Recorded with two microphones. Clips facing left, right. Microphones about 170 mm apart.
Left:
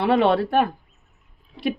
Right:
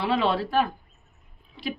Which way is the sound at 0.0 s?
60° left (ahead or behind).